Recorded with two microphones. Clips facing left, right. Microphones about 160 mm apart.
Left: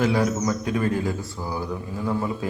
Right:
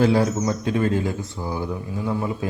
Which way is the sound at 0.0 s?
30° right (ahead or behind).